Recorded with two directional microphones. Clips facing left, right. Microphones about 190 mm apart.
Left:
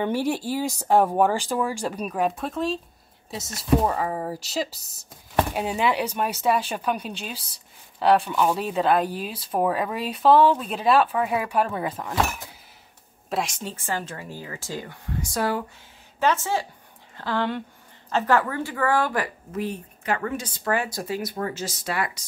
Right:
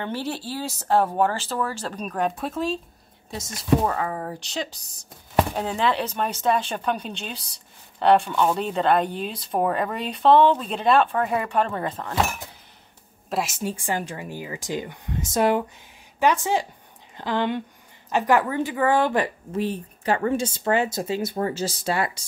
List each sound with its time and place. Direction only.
0.0 s speech: 15° left (ahead or behind)
13.3 s speech: 5° right (ahead or behind); by 22.2 s 30° right (ahead or behind)